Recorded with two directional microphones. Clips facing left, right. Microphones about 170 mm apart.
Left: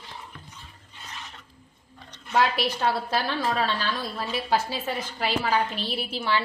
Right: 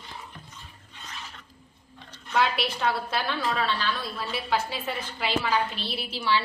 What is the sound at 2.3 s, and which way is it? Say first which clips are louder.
A woman's voice: left 2 dB; 40° left (ahead or behind).